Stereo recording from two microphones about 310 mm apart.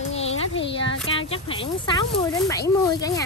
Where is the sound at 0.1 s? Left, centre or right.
Left.